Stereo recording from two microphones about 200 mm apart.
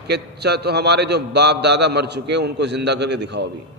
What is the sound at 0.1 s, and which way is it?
A man's voice, 55° right (ahead or behind).